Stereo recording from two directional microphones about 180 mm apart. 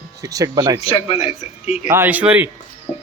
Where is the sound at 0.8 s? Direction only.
30° left (ahead or behind).